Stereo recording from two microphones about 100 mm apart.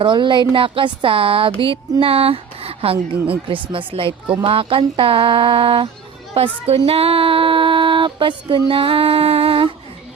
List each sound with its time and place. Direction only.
0.0 s a woman's voice: 55° right (ahead or behind)
6.3 s a woman's voice: 85° right
6.7 s a sound: 70° right (ahead or behind)